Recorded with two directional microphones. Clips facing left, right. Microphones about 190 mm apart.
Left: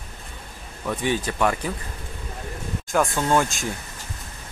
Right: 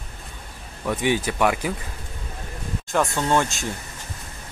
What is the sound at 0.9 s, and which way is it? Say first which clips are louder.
Speech: right 2 dB; 10° right (ahead or behind).